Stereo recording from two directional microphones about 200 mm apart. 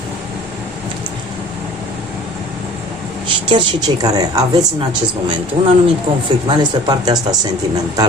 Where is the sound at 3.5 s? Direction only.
20° right (ahead or behind).